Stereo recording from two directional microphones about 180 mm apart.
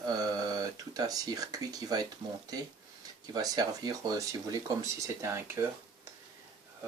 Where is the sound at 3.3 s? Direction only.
20° right (ahead or behind).